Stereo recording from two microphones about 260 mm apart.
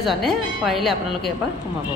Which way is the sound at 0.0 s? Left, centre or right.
Centre.